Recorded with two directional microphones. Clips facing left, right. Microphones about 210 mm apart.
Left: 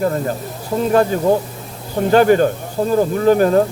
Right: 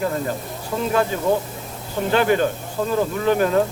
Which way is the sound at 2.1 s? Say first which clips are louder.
Left 6 dB; 45° left (ahead or behind).